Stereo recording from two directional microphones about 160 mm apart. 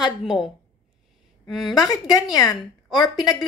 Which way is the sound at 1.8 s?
20° left (ahead or behind).